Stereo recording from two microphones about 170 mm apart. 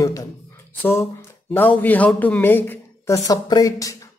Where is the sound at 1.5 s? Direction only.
10° left (ahead or behind).